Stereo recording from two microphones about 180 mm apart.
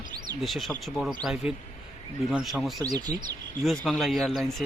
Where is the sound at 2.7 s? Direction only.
20° right (ahead or behind).